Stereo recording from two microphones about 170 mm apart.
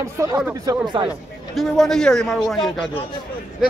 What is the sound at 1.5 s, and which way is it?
A man's voice, centre (ahead or behind).